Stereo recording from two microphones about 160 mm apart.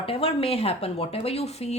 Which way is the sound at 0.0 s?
35° left (ahead or behind).